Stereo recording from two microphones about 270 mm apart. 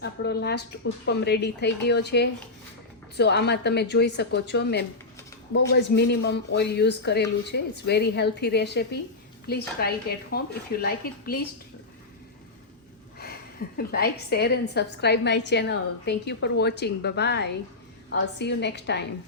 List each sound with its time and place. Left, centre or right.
0.0 s speech: left
13.7 s speech: left